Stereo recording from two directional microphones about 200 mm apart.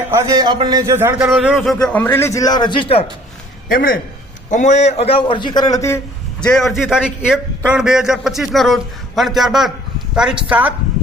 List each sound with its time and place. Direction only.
0.1 s a man's voice: 15° right (ahead or behind); by 3.1 s 25° left (ahead or behind)
3.7 s a man's voice: 45° left (ahead or behind); by 6.0 s 15° left (ahead or behind)
6.4 s a man's voice: centre (ahead or behind)